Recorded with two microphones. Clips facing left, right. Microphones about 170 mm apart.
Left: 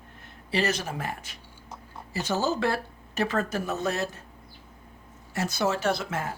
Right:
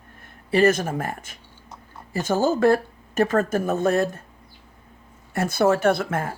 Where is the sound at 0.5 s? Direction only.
50° right (ahead or behind).